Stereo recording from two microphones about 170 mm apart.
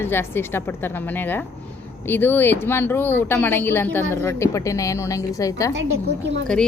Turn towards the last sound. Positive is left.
turn(degrees=5)  # may be behind; listen again after turning